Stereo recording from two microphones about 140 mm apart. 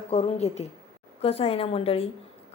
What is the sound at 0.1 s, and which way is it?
Speech, 45° left (ahead or behind).